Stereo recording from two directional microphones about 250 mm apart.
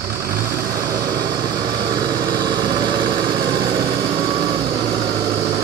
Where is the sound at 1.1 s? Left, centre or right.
Centre.